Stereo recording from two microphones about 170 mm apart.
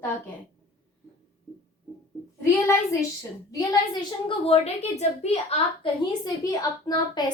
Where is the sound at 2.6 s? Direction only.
20° left (ahead or behind); by 5.9 s 35° left (ahead or behind).